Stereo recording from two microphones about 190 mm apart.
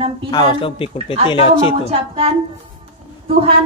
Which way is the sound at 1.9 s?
30° right (ahead or behind).